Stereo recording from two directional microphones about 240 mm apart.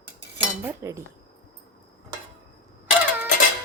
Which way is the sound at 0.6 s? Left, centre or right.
Centre.